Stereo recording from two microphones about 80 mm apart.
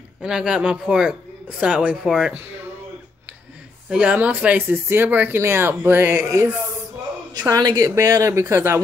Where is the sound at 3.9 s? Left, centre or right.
Centre; by 6.5 s right.